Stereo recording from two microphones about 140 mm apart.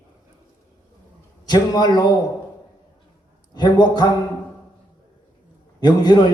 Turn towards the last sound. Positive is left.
turn(degrees=30)  # may be behind; listen again after turning